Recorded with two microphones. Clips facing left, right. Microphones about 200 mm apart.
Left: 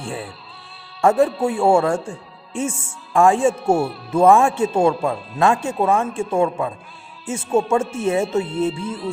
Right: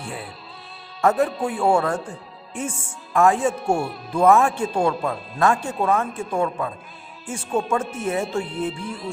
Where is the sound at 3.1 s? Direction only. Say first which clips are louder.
Left 3 dB; 30° left (ahead or behind).